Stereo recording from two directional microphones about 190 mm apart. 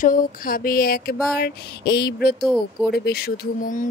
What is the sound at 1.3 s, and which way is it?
Speech, 55° left (ahead or behind).